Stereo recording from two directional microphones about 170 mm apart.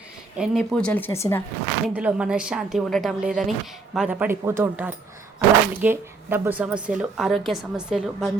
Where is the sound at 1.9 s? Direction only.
5° right (ahead or behind).